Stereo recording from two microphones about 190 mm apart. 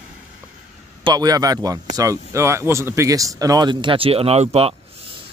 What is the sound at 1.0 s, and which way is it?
Speech, 20° right (ahead or behind).